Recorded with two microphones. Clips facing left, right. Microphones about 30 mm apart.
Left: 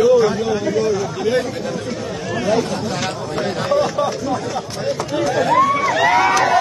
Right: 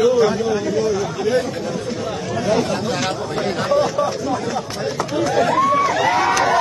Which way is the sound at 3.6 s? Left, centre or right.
Centre.